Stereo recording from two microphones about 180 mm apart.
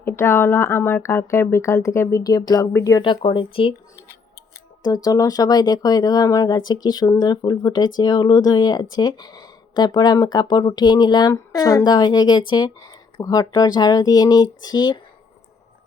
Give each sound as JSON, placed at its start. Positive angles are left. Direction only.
{"t": 0.0, "sound": "speech", "side_deg": 15}
{"t": 4.8, "sound": "speech", "side_deg": 20}